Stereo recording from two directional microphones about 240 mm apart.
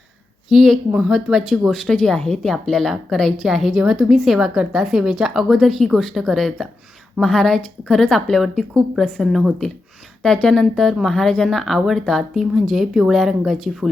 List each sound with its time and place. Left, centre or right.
0.5 s speech: centre